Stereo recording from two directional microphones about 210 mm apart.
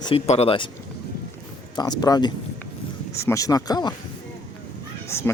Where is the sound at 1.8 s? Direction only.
20° left (ahead or behind).